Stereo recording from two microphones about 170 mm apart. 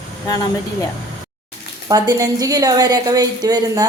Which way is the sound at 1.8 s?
20° right (ahead or behind).